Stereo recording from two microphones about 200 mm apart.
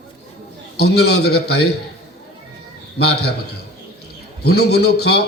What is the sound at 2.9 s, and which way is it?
Speech, 55° left (ahead or behind).